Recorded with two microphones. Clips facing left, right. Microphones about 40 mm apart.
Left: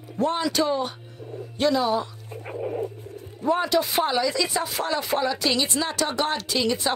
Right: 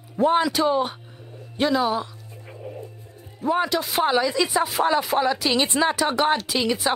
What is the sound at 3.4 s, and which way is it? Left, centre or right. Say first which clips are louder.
Speech: even; centre.